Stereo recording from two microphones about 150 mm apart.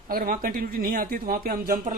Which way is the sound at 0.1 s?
70° right (ahead or behind).